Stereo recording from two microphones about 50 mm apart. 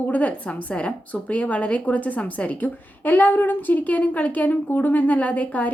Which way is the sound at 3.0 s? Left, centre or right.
Left.